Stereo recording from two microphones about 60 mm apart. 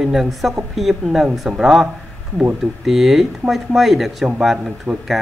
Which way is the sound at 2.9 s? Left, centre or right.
Centre.